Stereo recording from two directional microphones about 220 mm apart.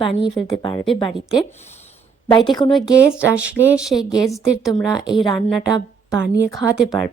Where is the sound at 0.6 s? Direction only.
20° left (ahead or behind).